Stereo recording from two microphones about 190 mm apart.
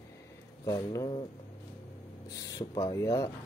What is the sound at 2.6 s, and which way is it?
Speech, 20° left (ahead or behind).